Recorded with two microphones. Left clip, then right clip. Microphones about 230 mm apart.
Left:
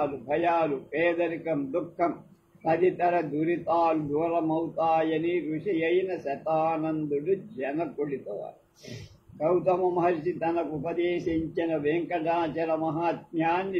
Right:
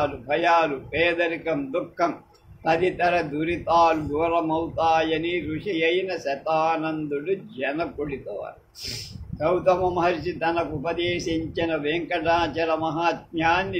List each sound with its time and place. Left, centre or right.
0.0 s a man's voice: right
9.4 s a man's voice: right